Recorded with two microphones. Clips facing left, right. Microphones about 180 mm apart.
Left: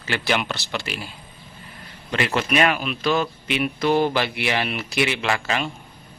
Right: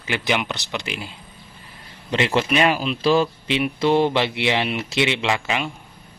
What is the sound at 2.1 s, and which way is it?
Speech, 25° right (ahead or behind).